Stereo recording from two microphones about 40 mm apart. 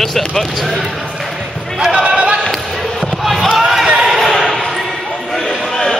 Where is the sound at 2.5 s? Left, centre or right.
Centre.